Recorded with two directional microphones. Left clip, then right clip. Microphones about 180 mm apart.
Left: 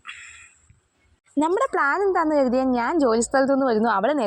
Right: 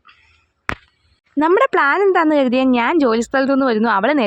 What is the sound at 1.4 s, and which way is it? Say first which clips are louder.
A woman's voice: right 7 dB; 20° right (ahead or behind).